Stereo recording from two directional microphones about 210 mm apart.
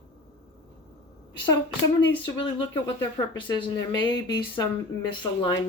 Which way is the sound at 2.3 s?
20° left (ahead or behind).